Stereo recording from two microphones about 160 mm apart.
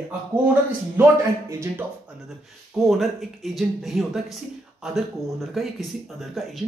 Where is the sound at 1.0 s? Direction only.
15° right (ahead or behind).